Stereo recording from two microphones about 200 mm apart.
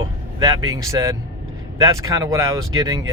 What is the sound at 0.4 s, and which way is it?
Speech, 15° right (ahead or behind).